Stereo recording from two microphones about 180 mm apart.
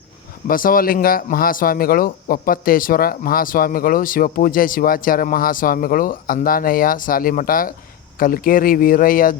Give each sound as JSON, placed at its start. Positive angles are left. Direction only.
{"t": 0.4, "sound": "speech", "side_deg": 50}